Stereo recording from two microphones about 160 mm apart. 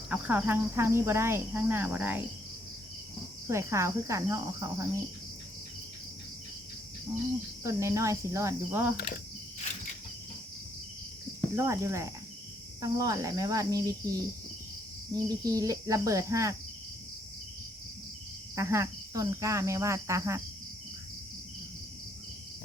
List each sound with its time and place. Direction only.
0.1 s cricket: 10° right (ahead or behind)
3.4 s cricket: 15° right (ahead or behind)
7.6 s cricket: 20° right (ahead or behind)
11.5 s cricket: 20° right (ahead or behind)
18.5 s cricket: 20° right (ahead or behind)